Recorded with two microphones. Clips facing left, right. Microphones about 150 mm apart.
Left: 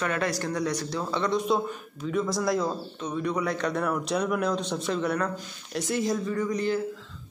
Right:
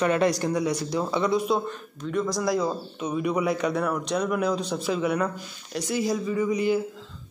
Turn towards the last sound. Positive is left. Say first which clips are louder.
# right 3 dB
turn(degrees=-10)  # may be behind; listen again after turning